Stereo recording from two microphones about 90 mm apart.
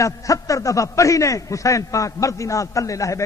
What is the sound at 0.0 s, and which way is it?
A man's voice, 40° left (ahead or behind).